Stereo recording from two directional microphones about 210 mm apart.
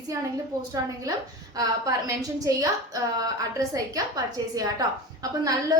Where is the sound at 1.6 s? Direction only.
15° right (ahead or behind).